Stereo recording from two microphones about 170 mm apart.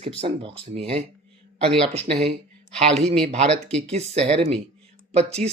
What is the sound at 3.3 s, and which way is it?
Speech, 40° right (ahead or behind).